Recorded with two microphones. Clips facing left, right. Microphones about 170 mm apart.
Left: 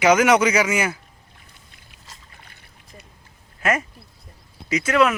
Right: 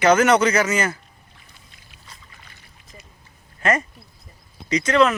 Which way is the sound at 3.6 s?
5° left (ahead or behind).